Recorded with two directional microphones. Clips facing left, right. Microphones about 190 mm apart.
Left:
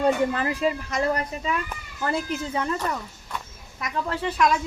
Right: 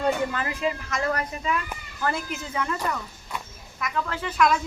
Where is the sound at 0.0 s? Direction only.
35° left (ahead or behind).